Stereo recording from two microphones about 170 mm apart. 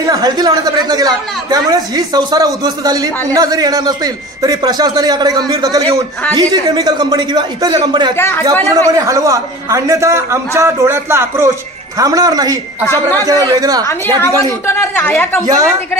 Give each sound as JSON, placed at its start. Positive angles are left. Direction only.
{"t": 0.0, "sound": "speech", "side_deg": -20}
{"t": 8.2, "sound": "a woman's voice", "side_deg": 15}
{"t": 8.6, "sound": "a man's voice", "side_deg": -20}
{"t": 12.8, "sound": "a woman's voice", "side_deg": 15}
{"t": 13.2, "sound": "speech", "side_deg": -20}
{"t": 13.8, "sound": "a woman's voice", "side_deg": 15}
{"t": 15.4, "sound": "speech", "side_deg": -20}